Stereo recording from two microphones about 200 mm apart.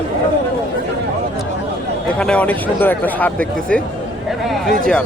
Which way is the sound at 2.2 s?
5° left (ahead or behind).